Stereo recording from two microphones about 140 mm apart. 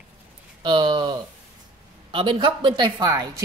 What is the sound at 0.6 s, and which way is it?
A woman's voice, 35° right (ahead or behind).